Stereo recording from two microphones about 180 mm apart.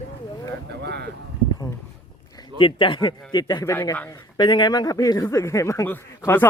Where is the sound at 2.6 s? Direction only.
25° left (ahead or behind); by 4.1 s 10° left (ahead or behind).